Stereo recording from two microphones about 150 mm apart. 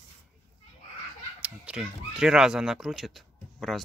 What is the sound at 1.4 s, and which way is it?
Speech, 5° right (ahead or behind).